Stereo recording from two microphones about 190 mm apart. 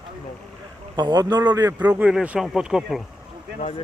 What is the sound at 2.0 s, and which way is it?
Speech, 5° right (ahead or behind).